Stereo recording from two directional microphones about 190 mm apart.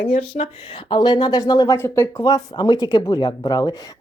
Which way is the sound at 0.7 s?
25° left (ahead or behind).